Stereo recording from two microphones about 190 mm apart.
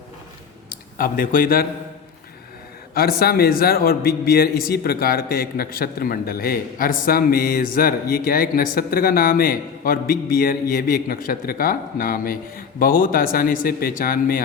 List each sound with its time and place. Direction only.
0.9 s a man's voice: 45° left (ahead or behind)
2.9 s a man's voice: 50° left (ahead or behind)